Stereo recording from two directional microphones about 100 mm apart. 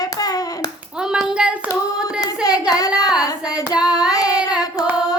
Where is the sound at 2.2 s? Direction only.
40° left (ahead or behind).